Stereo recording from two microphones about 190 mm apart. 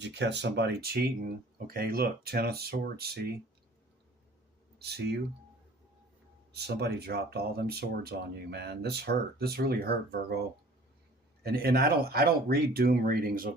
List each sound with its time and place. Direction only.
0.0 s speech: 65° right (ahead or behind)
4.8 s speech: 60° right (ahead or behind)
6.5 s speech: 60° right (ahead or behind)
11.4 s speech: 55° right (ahead or behind)